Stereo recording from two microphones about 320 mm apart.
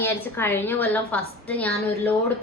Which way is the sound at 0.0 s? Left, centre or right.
Centre.